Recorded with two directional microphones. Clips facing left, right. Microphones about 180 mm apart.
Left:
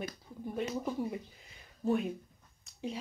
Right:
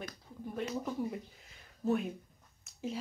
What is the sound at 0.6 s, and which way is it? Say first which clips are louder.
Speech: left 1 dB; 5° left (ahead or behind).